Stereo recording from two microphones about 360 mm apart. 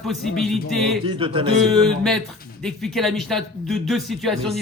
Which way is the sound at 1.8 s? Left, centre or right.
Centre.